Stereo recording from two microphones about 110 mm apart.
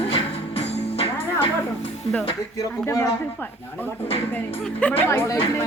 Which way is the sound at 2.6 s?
30° left (ahead or behind).